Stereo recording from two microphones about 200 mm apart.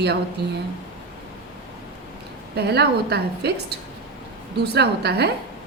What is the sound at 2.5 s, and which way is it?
A woman's voice, 55° right (ahead or behind).